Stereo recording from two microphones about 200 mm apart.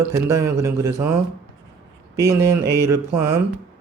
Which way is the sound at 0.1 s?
15° right (ahead or behind).